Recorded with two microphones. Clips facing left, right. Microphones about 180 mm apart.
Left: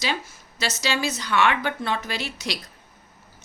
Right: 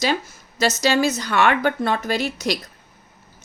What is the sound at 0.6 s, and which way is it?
A woman's voice, 45° right (ahead or behind).